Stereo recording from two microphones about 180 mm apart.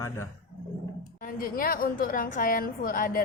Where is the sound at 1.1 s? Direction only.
50° left (ahead or behind).